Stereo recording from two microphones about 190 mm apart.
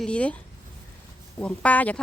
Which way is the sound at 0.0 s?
5° left (ahead or behind).